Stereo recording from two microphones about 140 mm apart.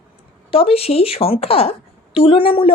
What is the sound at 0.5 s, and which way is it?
Speech, 45° left (ahead or behind).